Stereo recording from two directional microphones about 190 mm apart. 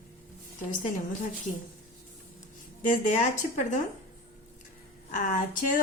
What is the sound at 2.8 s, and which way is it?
Speech, 40° left (ahead or behind).